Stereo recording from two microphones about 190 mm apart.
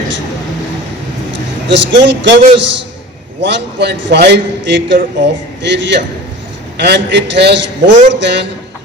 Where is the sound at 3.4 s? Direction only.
65° right (ahead or behind).